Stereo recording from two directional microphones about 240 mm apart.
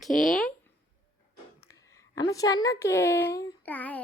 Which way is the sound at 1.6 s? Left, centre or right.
Centre.